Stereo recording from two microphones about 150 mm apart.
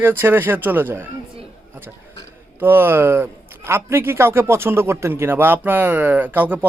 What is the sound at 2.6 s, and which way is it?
A man's voice, 15° right (ahead or behind).